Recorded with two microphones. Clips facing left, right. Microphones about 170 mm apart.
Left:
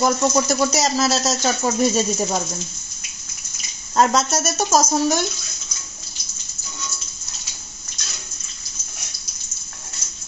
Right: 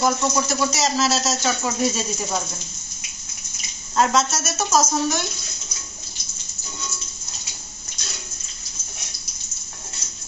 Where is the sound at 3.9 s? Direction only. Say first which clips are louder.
Left 2 dB; 40° left (ahead or behind).